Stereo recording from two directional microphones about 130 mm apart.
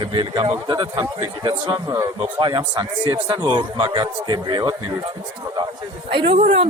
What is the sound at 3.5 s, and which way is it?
A man's voice, 40° right (ahead or behind).